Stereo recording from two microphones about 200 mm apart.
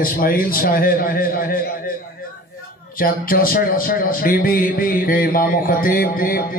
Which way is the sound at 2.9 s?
45° left (ahead or behind).